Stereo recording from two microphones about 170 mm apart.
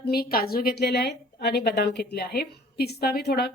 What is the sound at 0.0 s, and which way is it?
A woman's voice, 65° left (ahead or behind).